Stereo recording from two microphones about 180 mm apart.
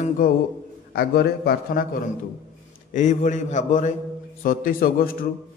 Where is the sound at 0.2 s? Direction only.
50° left (ahead or behind).